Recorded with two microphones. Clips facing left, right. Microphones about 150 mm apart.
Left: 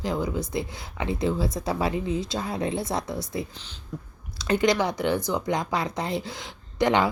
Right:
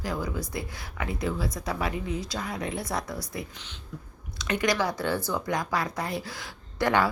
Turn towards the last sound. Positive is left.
turn(degrees=20)  # may be behind; listen again after turning